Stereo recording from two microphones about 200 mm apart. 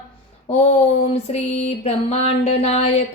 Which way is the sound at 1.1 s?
30° left (ahead or behind).